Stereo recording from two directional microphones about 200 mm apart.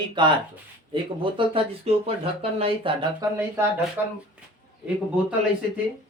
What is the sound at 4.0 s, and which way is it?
Speech, 10° right (ahead or behind).